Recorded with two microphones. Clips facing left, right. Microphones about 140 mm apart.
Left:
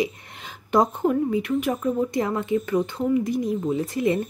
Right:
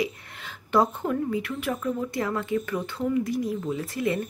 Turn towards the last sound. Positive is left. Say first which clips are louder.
# left 4 dB
turn(degrees=20)  # may be behind; listen again after turning